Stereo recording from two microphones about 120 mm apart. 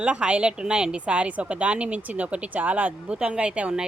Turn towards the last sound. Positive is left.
turn(degrees=-10)  # may be behind; listen again after turning